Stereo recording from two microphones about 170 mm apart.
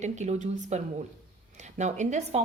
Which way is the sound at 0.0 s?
45° right (ahead or behind).